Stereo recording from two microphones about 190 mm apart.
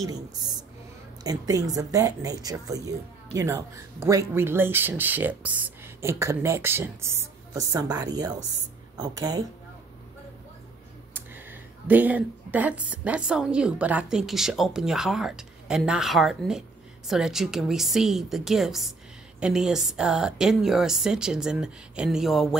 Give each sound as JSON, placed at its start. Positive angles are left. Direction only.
{"t": 0.0, "sound": "speech", "side_deg": -20}
{"t": 11.1, "sound": "speech", "side_deg": -10}